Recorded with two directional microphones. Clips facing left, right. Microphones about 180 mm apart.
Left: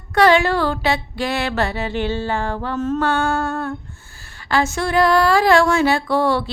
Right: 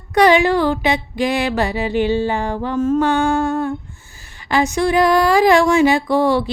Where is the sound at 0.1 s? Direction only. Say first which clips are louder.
Right 2 dB; 15° right (ahead or behind).